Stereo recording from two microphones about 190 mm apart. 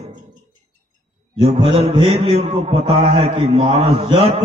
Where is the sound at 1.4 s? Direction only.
30° right (ahead or behind).